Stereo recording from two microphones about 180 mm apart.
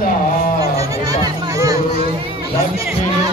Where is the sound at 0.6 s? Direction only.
20° right (ahead or behind).